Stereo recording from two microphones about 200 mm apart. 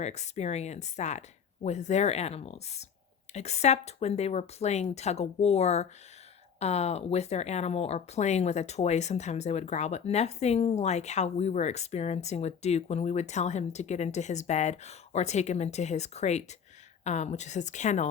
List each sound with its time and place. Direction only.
0.0 s speech: 35° left (ahead or behind)